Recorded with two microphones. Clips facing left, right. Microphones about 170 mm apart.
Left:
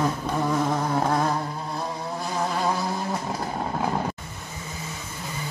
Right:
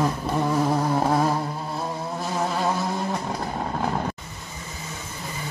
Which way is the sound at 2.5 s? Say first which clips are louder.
Right 1 dB; centre (ahead or behind).